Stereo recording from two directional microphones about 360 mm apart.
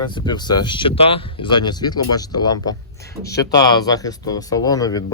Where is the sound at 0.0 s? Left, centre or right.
Centre.